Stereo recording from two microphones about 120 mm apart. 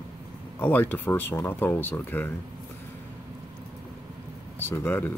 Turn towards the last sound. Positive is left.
turn(degrees=15)  # may be behind; listen again after turning